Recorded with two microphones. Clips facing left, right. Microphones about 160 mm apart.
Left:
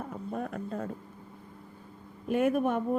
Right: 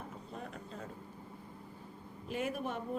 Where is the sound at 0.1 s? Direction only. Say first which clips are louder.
Left 10 dB; 55° left (ahead or behind).